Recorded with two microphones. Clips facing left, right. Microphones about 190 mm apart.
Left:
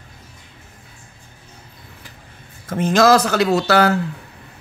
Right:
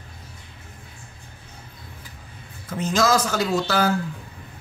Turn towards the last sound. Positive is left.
turn(degrees=70)  # may be behind; listen again after turning